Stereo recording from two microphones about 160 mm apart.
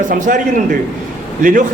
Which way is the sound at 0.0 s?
55° right (ahead or behind).